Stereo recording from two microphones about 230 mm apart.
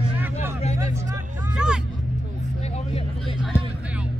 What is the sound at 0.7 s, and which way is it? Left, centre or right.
Hubbub, centre.